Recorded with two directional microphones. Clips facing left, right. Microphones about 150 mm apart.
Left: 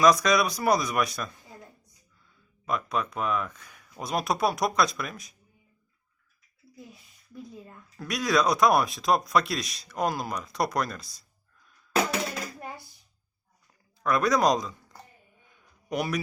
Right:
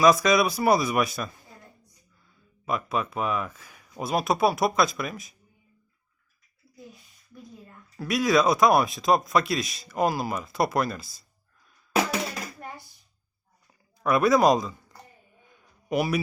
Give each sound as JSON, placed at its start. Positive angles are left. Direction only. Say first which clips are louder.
{"t": 0.0, "sound": "speech", "louder": "right 2 dB", "side_deg": -5}
{"t": 2.6, "sound": "speech", "louder": "right 1 dB", "side_deg": -5}
{"t": 7.9, "sound": "speech", "louder": "right 3 dB", "side_deg": -5}
{"t": 14.0, "sound": "speech", "louder": "right 3 dB", "side_deg": -5}